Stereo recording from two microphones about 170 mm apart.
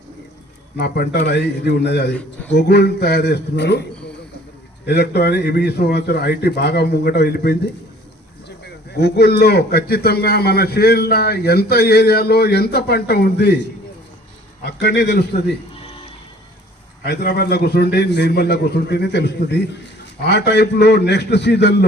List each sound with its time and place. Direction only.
0.8 s speech: 65° left (ahead or behind); by 3.8 s 85° left
4.9 s speech: 70° left (ahead or behind)
17.1 s a man's voice: 70° left (ahead or behind)